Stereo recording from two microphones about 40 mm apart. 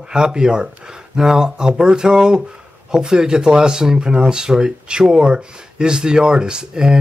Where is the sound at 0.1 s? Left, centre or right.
Centre.